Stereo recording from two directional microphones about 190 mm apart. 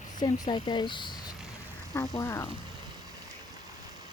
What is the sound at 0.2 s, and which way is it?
Speech, 20° left (ahead or behind).